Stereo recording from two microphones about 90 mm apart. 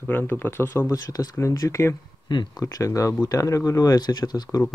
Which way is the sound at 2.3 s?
55° left (ahead or behind).